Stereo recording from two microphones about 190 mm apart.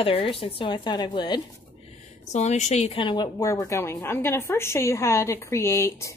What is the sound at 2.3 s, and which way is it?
A woman's voice, 40° left (ahead or behind).